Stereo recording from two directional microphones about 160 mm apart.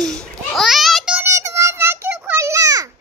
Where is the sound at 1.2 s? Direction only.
20° right (ahead or behind).